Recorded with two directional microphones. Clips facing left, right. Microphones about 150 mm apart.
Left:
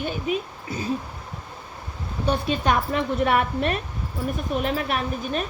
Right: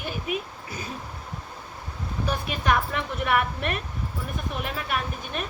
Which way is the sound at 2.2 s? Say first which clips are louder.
Left 4 dB; 30° left (ahead or behind).